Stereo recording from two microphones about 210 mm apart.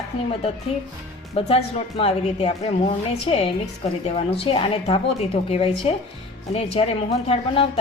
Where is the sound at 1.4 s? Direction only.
30° left (ahead or behind).